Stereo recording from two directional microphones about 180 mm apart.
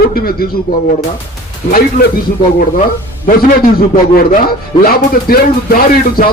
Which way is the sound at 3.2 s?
55° left (ahead or behind).